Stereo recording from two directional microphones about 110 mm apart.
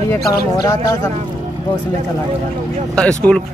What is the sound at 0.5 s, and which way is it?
Speech, 30° left (ahead or behind).